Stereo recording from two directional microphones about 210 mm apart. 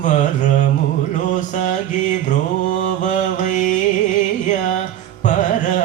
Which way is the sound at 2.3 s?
35° left (ahead or behind).